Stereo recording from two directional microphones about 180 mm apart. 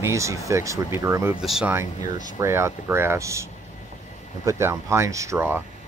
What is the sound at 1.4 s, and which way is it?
Speech, centre (ahead or behind).